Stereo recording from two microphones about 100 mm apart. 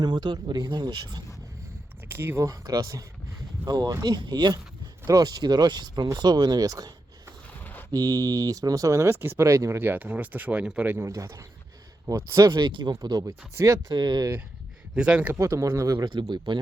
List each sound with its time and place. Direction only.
0.0 s speech: 45° right (ahead or behind)
2.0 s speech: 25° right (ahead or behind)
7.6 s a sound: 20° left (ahead or behind)
7.9 s speech: 40° right (ahead or behind); by 10.9 s 10° right (ahead or behind)
10.9 s speech: 30° right (ahead or behind)
12.6 s speech: 50° right (ahead or behind)
13.5 s speech: 30° right (ahead or behind)
13.9 s speech: 45° right (ahead or behind)
14.9 s speech: 10° right (ahead or behind)
15.4 s speech: 30° right (ahead or behind)
16.2 s speech: 50° right (ahead or behind)